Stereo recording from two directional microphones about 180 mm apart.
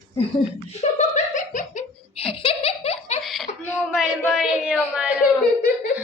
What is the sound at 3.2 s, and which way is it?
Laughter, centre (ahead or behind).